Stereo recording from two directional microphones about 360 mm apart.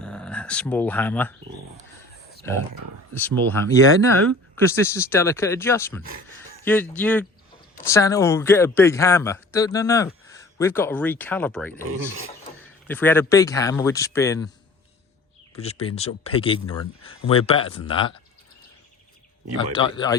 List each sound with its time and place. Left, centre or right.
0.0 s speech: centre
3.2 s speech: centre
11.9 s speech: right
12.9 s speech: centre
15.5 s speech: centre
19.5 s speech: centre